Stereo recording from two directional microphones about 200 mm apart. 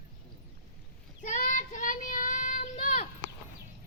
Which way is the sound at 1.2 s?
40° left (ahead or behind).